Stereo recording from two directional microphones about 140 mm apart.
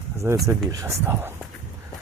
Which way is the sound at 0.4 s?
20° right (ahead or behind).